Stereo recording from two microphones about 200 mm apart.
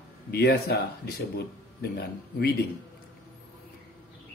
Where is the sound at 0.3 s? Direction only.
55° left (ahead or behind).